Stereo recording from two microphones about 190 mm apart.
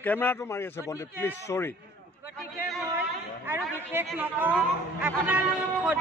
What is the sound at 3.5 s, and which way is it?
A man's voice, 10° right (ahead or behind).